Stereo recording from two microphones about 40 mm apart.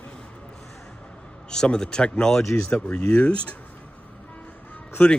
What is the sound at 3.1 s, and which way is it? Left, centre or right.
Speech, left.